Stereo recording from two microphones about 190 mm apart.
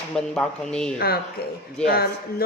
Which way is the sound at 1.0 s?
55° left (ahead or behind).